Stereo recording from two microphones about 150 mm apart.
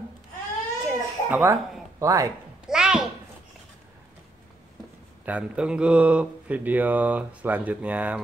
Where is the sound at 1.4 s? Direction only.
20° right (ahead or behind).